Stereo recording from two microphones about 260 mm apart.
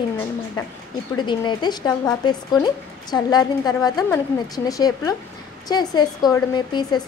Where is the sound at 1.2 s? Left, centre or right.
Centre.